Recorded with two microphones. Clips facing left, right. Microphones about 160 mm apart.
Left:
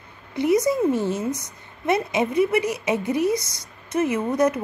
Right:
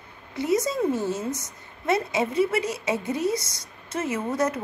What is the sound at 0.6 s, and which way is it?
A woman's voice, 15° left (ahead or behind).